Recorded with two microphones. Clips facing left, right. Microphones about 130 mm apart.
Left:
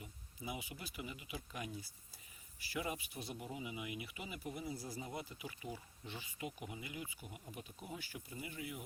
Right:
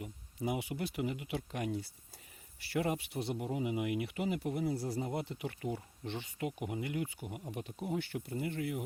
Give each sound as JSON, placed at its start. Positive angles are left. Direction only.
{"t": 0.0, "sound": "speech", "side_deg": -70}